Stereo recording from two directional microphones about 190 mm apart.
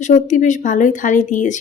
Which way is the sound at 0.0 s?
40° left (ahead or behind).